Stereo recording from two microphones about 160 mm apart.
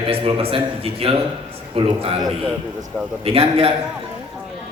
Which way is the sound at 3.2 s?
35° right (ahead or behind).